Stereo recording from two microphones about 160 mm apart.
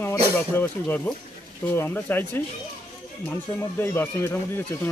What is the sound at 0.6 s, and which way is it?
Speech, 10° left (ahead or behind).